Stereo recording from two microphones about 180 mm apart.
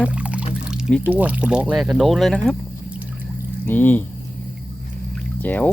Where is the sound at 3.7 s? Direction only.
10° left (ahead or behind).